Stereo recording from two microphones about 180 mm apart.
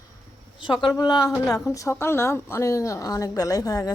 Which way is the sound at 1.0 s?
20° left (ahead or behind).